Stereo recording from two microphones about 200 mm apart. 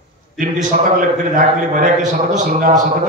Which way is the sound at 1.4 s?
40° right (ahead or behind).